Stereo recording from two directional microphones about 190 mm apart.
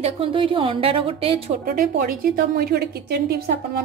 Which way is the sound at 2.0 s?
50° right (ahead or behind).